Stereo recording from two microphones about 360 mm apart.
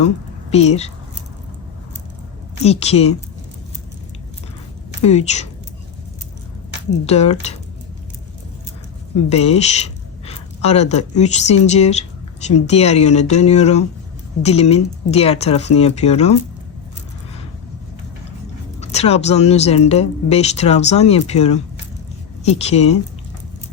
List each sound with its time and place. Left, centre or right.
0.5 s speech: centre
2.6 s speech: centre
5.0 s speech: centre
7.0 s speech: centre
9.3 s a sound: centre
11.2 s speech: centre
18.8 s a woman's voice: centre